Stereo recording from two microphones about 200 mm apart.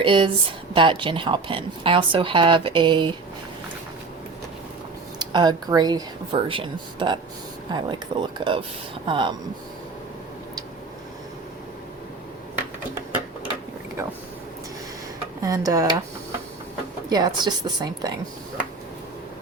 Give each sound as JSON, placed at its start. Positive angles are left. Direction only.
{"t": 0.0, "sound": "a woman's voice", "side_deg": -25}
{"t": 5.2, "sound": "a woman's voice", "side_deg": -20}
{"t": 15.4, "sound": "speech", "side_deg": -20}
{"t": 17.1, "sound": "a woman's voice", "side_deg": -20}